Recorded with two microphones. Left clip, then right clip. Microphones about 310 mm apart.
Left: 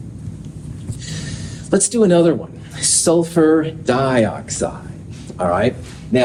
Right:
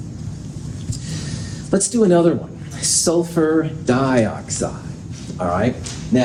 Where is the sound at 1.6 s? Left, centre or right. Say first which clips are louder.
Left 2 dB; left.